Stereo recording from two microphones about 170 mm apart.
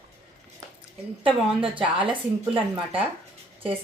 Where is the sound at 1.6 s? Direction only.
30° right (ahead or behind).